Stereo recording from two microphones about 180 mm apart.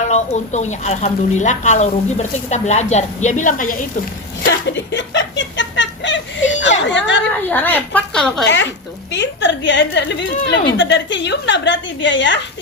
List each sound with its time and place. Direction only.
0.1 s speech: 40° left (ahead or behind)
4.4 s speech: 75° left (ahead or behind)
7.5 s a woman's voice: 10° left (ahead or behind)
8.4 s a woman's voice: 80° left
10.7 s a woman's voice: 90° left